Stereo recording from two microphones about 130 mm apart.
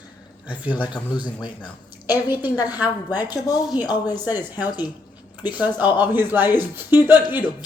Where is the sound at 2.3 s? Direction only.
15° right (ahead or behind).